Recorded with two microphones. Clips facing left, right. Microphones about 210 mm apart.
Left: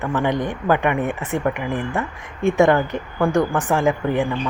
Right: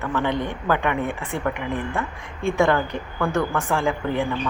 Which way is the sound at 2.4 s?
20° left (ahead or behind).